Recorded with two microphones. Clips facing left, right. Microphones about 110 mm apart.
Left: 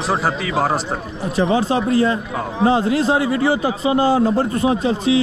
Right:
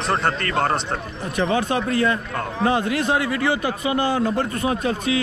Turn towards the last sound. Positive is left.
turn(degrees=25)  # may be behind; listen again after turning